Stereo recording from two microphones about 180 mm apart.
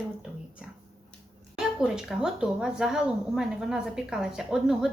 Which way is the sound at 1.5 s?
5° right (ahead or behind).